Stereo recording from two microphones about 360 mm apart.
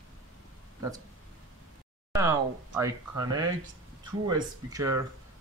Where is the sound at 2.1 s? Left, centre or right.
Centre.